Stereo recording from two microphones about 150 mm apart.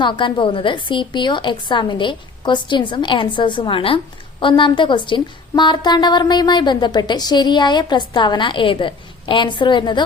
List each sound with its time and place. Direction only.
0.0 s a woman's voice: 30° left (ahead or behind)